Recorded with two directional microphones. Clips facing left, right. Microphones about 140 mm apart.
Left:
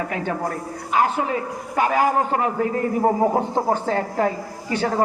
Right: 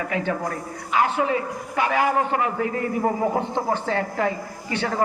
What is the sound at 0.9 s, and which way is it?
A man's voice, 40° left (ahead or behind).